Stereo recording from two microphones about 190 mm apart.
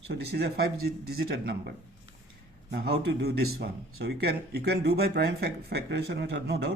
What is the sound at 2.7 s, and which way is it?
Speech, 55° right (ahead or behind).